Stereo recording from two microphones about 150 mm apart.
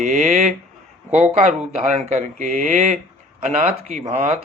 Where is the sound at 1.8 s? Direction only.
50° right (ahead or behind).